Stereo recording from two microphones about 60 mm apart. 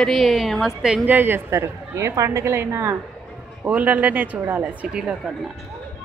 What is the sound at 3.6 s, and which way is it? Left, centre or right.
A woman's voice, right.